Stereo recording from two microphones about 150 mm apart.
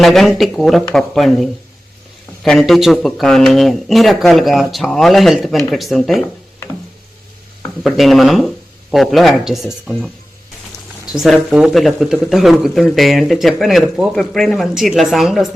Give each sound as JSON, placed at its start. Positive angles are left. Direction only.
{"t": 0.0, "sound": "speech", "side_deg": 0}
{"t": 7.9, "sound": "speech", "side_deg": 0}
{"t": 11.1, "sound": "speech", "side_deg": -5}